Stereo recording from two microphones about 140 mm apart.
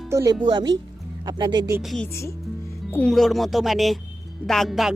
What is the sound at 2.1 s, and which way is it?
Speech, 20° left (ahead or behind).